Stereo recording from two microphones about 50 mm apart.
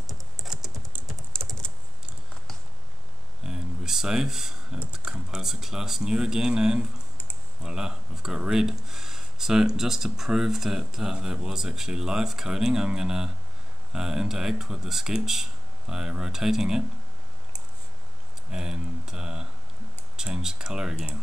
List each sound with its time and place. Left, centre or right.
0.4 s typing: centre
1.3 s typing: centre
3.4 s a sound: centre
4.9 s speech: centre
18.5 s speech: centre